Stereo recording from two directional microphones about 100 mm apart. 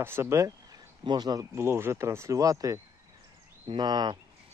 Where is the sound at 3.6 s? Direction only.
50° right (ahead or behind).